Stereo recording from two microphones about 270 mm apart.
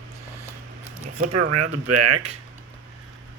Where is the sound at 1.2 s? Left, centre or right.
Right.